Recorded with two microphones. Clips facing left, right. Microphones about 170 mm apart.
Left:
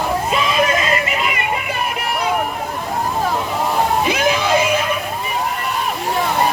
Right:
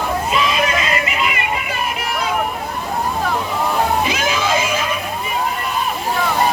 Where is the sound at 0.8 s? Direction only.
40° left (ahead or behind).